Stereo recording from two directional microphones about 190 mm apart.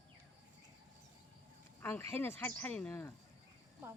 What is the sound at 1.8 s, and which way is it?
Speech, 10° left (ahead or behind).